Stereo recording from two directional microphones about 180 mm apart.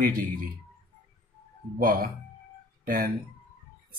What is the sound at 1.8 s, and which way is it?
Speech, 50° right (ahead or behind).